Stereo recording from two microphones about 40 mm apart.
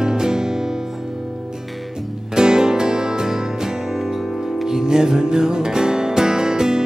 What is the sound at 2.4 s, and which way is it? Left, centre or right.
Music, centre.